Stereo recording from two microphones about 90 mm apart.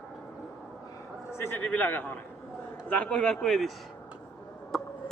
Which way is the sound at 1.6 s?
15° left (ahead or behind).